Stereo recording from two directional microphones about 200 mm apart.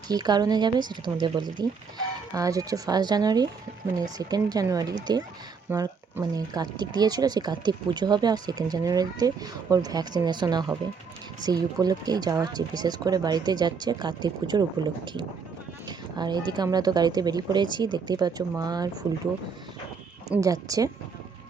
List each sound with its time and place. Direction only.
0.1 s speech: 20° right (ahead or behind)
20.3 s speech: 15° right (ahead or behind)